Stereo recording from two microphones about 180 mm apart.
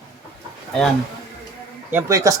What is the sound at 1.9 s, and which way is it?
Speech, 15° right (ahead or behind).